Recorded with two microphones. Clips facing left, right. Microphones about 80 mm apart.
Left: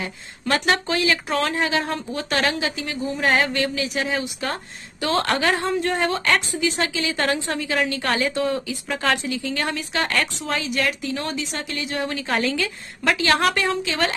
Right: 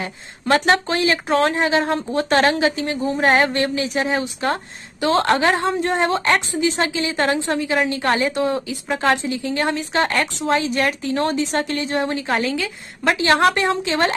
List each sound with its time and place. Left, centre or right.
0.0 s a woman's voice: right